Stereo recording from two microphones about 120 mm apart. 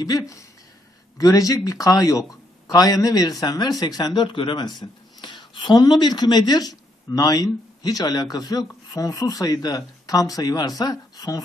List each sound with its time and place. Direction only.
0.0 s speech: 30° left (ahead or behind)